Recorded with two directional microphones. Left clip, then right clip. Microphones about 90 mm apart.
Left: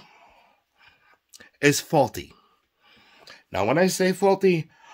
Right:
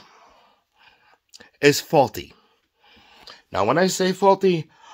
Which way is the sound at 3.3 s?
30° left (ahead or behind).